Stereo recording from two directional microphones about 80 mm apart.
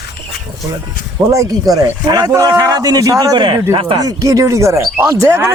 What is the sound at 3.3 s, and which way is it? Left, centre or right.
Speech, right.